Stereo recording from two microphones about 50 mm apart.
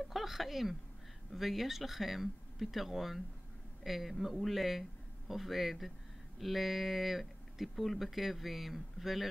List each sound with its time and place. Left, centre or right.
0.0 s speech: centre